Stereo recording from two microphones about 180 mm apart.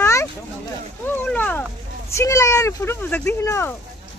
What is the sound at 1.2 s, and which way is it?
A child's voice, 10° left (ahead or behind).